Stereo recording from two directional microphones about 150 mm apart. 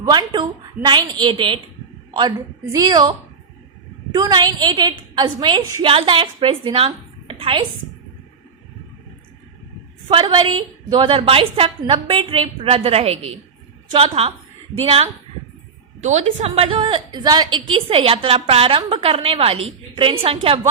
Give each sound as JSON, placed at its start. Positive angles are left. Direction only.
{"t": 0.0, "sound": "a woman's voice", "side_deg": -30}
{"t": 2.7, "sound": "a woman's voice", "side_deg": -25}
{"t": 4.1, "sound": "a woman's voice", "side_deg": -25}
{"t": 10.1, "sound": "a woman's voice", "side_deg": -35}
{"t": 16.0, "sound": "a woman's voice", "side_deg": -50}